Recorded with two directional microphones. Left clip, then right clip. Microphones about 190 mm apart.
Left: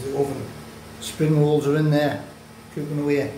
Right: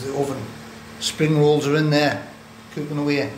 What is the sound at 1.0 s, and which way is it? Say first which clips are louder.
Speech: right 4 dB; 5° left (ahead or behind).